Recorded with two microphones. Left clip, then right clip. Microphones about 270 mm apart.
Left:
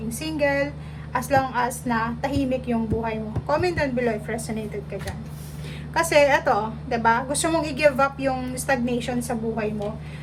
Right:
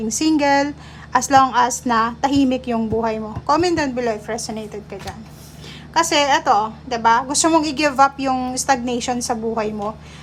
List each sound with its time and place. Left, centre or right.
0.2 s a woman's voice: centre
6.0 s a woman's voice: centre